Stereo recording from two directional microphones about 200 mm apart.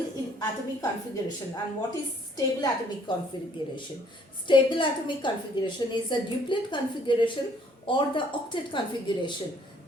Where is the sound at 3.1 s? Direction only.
20° left (ahead or behind).